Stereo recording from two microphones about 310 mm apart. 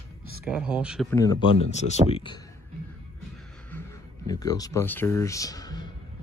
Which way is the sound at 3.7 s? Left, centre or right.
Centre.